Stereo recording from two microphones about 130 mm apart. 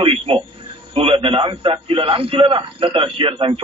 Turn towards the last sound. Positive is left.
turn(degrees=-45)  # may be behind; listen again after turning